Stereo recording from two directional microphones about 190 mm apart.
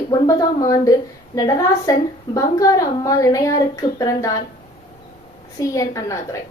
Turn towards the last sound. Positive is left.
turn(degrees=15)  # may be behind; listen again after turning